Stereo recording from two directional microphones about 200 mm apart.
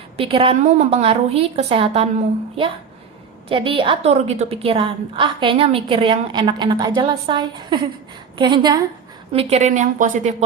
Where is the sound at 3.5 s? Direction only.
25° right (ahead or behind).